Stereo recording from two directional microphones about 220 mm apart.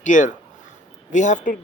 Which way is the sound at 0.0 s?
35° left (ahead or behind).